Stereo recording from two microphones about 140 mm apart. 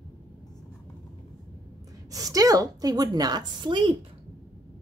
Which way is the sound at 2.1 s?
25° right (ahead or behind).